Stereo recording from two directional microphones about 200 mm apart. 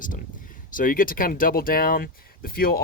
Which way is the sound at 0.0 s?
40° left (ahead or behind).